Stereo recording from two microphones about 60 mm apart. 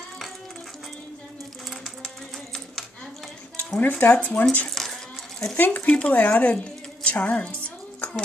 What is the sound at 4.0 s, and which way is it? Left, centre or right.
Speech, left.